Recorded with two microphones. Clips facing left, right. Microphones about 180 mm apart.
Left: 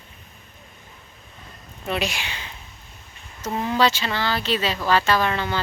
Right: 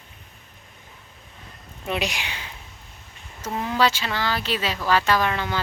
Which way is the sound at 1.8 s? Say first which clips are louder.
Left 1 dB; 15° right (ahead or behind).